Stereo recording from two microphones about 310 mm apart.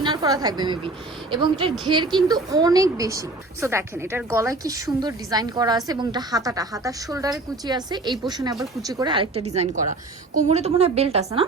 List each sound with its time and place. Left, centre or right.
0.0 s a woman's voice: centre